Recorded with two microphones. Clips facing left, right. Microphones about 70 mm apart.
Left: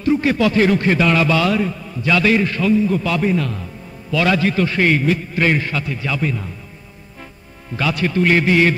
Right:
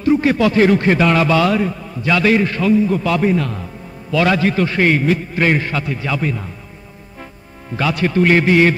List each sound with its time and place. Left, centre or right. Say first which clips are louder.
0.0 s a man's voice: right 2 dB; right
7.7 s a man's voice: right 2 dB; right